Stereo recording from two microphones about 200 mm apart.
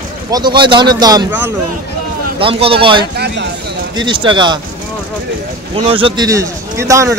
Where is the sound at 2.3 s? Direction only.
25° right (ahead or behind).